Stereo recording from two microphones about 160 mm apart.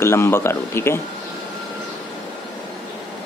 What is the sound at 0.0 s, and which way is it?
Speech, 15° left (ahead or behind).